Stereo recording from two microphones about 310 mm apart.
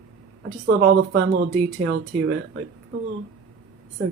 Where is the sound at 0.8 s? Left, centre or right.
Right.